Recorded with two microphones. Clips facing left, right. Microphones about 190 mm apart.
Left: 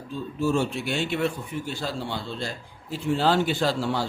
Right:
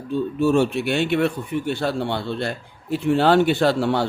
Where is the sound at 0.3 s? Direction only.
65° right (ahead or behind).